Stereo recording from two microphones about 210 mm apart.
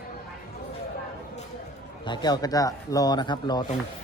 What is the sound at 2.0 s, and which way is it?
Speech, 20° left (ahead or behind).